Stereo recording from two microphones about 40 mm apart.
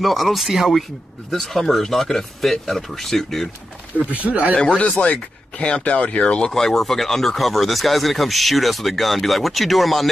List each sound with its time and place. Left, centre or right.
0.0 s speech: centre
4.1 s speech: right
4.6 s speech: left
6.5 s speech: centre